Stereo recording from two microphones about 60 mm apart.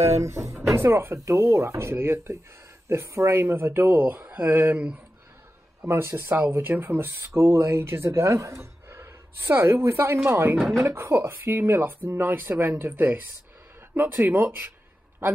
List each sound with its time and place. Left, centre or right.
0.0 s speech: right
0.7 s speech: right
2.9 s speech: right
4.7 s speech: right
5.9 s speech: right
14.2 s speech: right